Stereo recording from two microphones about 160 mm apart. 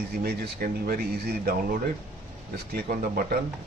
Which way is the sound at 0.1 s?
75° right (ahead or behind).